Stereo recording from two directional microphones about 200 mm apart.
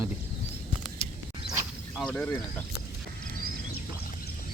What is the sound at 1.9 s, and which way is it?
Speech, 5° left (ahead or behind).